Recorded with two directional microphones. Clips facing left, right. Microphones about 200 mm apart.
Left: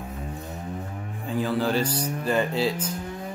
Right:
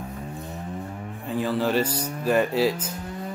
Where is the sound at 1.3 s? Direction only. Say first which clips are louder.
Right 1 dB; centre (ahead or behind).